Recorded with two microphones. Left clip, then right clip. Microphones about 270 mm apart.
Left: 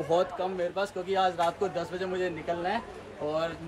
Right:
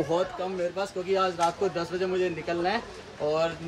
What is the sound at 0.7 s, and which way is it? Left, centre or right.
Speech, centre.